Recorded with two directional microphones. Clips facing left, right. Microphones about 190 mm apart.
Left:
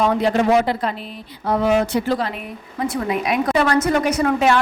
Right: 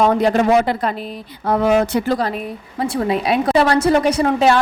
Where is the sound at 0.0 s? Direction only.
50° right (ahead or behind).